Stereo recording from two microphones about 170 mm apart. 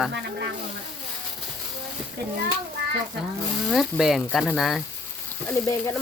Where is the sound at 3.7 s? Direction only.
Centre (ahead or behind).